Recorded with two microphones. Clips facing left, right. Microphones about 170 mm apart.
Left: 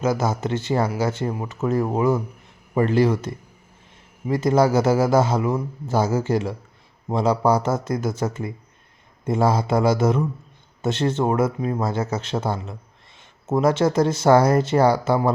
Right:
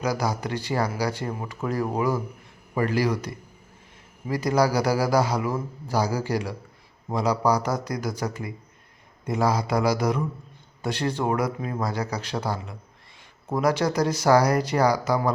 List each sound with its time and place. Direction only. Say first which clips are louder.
0.0 s a man's voice: left 4 dB; 25° left (ahead or behind)